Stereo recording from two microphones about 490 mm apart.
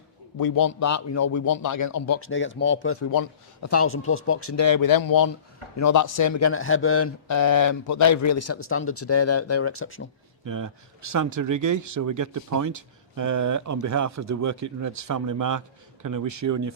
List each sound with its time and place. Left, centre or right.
0.3 s a man's voice: left
10.4 s speech: right